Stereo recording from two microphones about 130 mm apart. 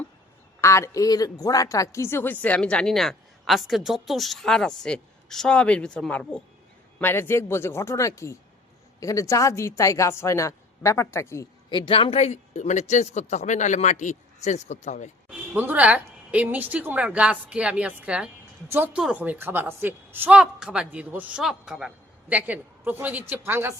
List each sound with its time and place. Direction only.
0.6 s a woman's voice: 20° left (ahead or behind)
11.7 s speech: 40° left (ahead or behind); by 15.1 s 65° left (ahead or behind)
15.3 s a woman's voice: 10° right (ahead or behind)